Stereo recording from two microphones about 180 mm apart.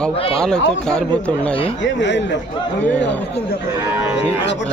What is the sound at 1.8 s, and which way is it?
Speech, 85° left.